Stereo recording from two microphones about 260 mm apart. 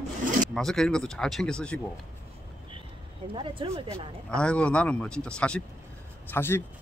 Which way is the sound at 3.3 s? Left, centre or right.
Centre.